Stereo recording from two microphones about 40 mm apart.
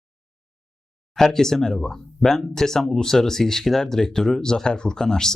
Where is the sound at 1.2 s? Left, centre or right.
Centre.